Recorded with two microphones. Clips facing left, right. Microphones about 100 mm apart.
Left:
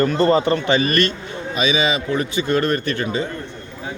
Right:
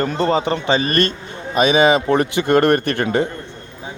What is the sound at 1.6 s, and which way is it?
A man's voice, 55° right (ahead or behind).